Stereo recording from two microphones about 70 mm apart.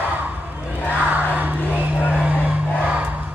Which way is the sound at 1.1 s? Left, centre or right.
Right.